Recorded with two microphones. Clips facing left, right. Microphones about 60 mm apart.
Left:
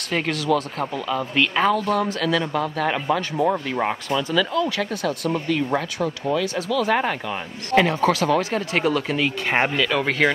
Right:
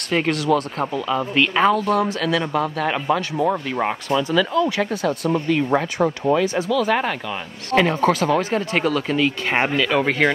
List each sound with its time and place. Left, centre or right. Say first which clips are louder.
0.1 s speech: right 3 dB; centre
5.9 s speech: right 5 dB; right
6.7 s speech: left 2 dB; centre
9.6 s speech: right 2 dB; centre